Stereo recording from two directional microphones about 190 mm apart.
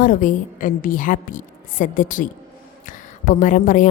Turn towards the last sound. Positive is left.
turn(degrees=45)  # may be behind; listen again after turning